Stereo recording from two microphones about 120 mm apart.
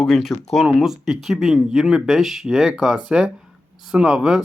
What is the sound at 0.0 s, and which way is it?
Speech, centre (ahead or behind).